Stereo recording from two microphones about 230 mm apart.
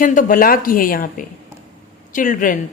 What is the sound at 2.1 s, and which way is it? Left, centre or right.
Speech, left.